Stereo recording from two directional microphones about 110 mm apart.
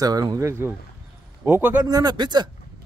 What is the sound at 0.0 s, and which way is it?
A man's voice, 35° right (ahead or behind).